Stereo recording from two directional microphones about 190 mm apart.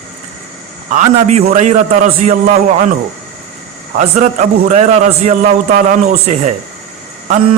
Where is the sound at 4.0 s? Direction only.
40° right (ahead or behind).